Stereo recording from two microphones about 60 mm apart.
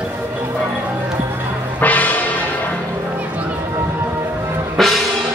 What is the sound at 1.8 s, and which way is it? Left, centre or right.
Music, left.